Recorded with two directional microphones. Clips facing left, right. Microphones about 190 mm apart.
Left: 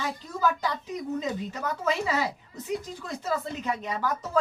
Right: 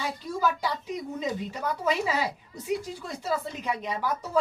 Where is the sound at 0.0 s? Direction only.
10° right (ahead or behind).